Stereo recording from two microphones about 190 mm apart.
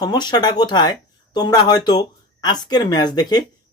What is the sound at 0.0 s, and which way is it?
Speech, 20° left (ahead or behind).